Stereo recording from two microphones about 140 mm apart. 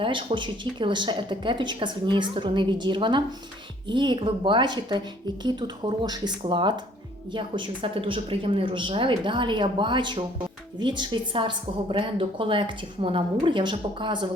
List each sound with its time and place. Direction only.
0.0 s a woman's voice: 40° right (ahead or behind)